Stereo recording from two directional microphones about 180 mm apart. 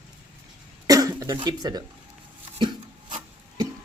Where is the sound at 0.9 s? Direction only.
20° right (ahead or behind).